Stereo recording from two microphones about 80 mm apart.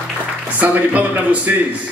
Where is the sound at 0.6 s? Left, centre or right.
Right.